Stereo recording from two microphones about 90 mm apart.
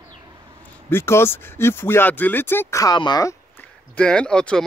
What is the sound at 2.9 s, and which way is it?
Speech, 55° left (ahead or behind).